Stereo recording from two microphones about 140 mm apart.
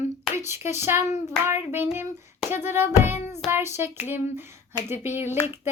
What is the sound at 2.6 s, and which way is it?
Child singing, 15° right (ahead or behind).